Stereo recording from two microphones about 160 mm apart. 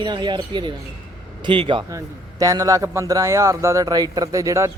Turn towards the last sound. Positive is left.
turn(degrees=-20)  # may be behind; listen again after turning